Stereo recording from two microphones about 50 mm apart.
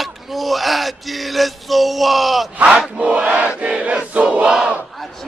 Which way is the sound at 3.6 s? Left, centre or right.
Right.